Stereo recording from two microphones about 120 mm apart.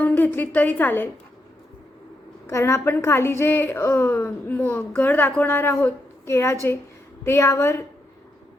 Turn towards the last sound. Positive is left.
turn(degrees=25)  # may be behind; listen again after turning